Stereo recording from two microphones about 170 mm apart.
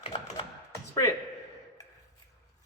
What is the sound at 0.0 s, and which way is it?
Tap, 35° left (ahead or behind).